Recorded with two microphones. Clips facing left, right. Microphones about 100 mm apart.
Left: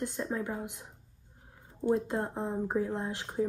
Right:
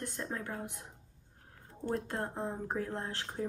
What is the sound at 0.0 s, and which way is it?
Speech, 15° left (ahead or behind).